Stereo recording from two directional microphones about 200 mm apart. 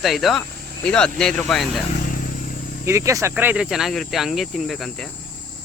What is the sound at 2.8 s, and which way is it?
Speech, 15° right (ahead or behind).